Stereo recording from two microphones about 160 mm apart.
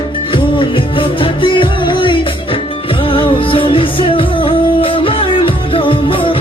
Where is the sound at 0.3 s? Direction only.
30° left (ahead or behind).